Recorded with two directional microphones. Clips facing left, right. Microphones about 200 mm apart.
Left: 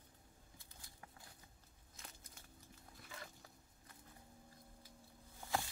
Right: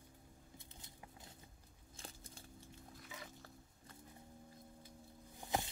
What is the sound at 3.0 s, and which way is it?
Dog, centre (ahead or behind).